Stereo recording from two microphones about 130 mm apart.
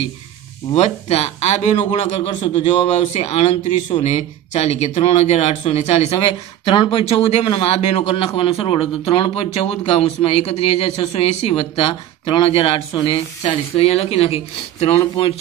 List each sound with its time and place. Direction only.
0.7 s speech: 60° left (ahead or behind)
2.4 s speech: 40° left (ahead or behind)
2.9 s speech: 55° left (ahead or behind)